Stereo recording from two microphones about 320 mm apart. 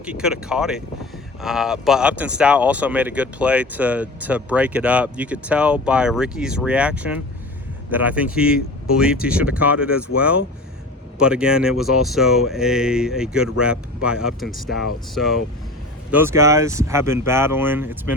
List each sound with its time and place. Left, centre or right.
0.0 s speech: centre